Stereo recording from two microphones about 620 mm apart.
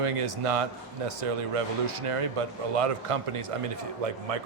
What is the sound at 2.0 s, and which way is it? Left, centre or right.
Speech, right.